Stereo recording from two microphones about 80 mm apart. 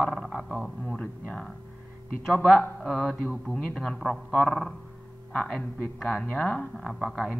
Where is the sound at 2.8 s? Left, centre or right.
Centre.